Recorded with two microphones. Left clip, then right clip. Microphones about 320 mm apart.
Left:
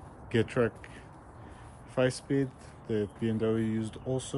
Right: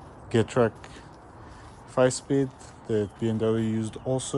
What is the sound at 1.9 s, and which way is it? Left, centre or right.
Speech, centre.